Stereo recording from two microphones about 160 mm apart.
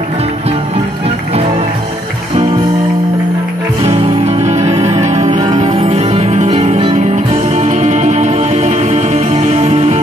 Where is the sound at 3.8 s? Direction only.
40° right (ahead or behind).